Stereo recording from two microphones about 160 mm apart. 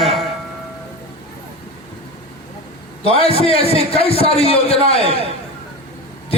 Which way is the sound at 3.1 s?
35° left (ahead or behind).